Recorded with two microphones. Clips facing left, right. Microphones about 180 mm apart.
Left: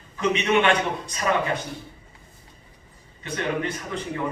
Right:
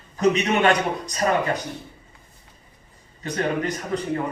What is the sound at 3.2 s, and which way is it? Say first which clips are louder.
Speech: right 3 dB; 40° right (ahead or behind).